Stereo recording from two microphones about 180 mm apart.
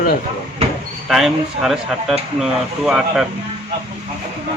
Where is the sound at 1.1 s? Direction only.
Centre (ahead or behind).